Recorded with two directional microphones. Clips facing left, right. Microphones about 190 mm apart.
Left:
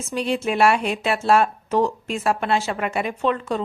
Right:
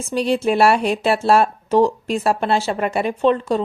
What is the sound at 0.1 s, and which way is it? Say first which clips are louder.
Speech: right 5 dB; 35° right (ahead or behind).